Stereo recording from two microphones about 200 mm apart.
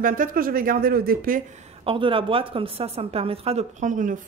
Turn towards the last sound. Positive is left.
turn(degrees=-40)  # may be behind; listen again after turning